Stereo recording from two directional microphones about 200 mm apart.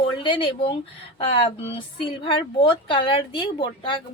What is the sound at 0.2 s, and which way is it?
A woman's voice, 25° left (ahead or behind).